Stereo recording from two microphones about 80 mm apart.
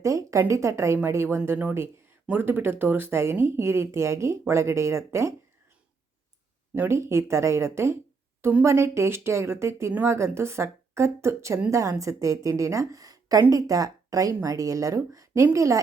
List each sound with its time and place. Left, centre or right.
0.0 s speech: right
6.7 s a woman's voice: right